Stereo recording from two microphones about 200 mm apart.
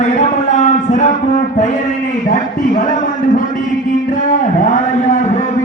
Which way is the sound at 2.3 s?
40° left (ahead or behind).